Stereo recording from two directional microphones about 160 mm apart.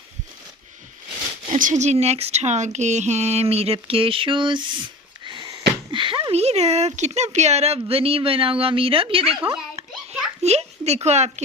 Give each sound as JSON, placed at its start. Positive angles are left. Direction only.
{"t": 1.5, "sound": "speech", "side_deg": -50}
{"t": 9.4, "sound": "a child's voice", "side_deg": -15}
{"t": 10.4, "sound": "speech", "side_deg": -40}